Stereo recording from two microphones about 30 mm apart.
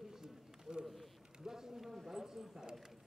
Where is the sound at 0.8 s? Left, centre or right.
Centre.